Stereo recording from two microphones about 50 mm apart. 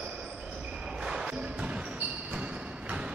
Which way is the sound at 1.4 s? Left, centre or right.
Right.